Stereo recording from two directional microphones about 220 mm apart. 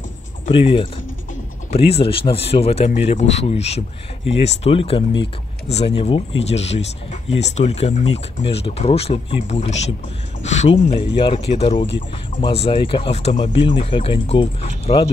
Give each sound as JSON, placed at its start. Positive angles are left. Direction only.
{"t": 0.5, "sound": "speech", "side_deg": 25}
{"t": 2.0, "sound": "speech", "side_deg": 25}